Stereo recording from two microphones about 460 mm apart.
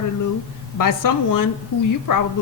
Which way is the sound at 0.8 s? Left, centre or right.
Left.